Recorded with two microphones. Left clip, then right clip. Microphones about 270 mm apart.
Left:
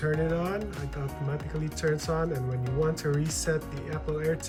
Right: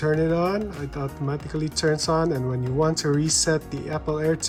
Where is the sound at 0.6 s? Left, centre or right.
Centre.